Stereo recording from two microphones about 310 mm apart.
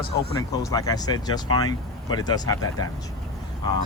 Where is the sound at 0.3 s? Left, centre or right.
Centre.